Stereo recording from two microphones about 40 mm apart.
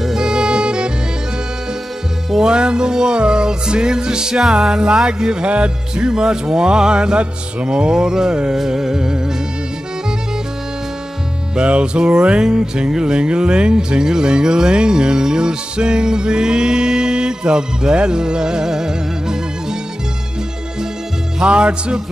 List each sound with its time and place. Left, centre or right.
0.0 s music: centre
2.5 s music: right
11.5 s music: right
21.4 s music: right